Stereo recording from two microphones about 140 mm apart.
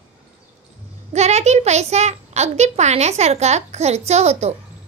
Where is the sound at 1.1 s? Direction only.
50° right (ahead or behind).